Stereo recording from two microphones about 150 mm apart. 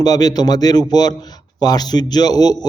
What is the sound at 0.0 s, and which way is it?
A man's voice, 25° left (ahead or behind).